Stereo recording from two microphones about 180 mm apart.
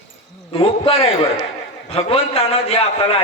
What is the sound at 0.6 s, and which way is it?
A man's voice, 30° left (ahead or behind).